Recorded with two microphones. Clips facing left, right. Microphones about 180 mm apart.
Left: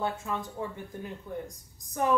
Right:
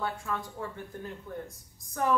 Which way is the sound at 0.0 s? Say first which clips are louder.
Left 2 dB; 20° left (ahead or behind).